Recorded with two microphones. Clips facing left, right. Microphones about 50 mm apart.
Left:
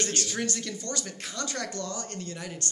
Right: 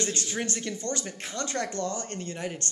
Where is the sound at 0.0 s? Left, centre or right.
Right.